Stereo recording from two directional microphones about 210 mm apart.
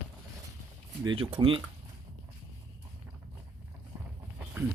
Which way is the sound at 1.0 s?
25° right (ahead or behind).